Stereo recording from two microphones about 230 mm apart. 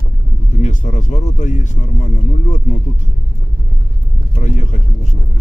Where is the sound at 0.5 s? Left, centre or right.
Left.